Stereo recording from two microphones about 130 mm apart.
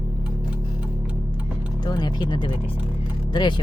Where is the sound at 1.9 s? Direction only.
35° left (ahead or behind).